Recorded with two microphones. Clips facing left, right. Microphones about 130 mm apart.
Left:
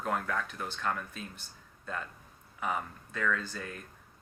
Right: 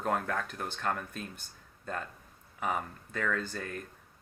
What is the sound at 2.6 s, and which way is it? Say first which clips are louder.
Speech: right 1 dB; 50° right (ahead or behind).